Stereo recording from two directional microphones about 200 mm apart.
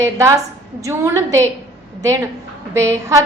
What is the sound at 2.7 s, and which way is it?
Speech, 15° right (ahead or behind).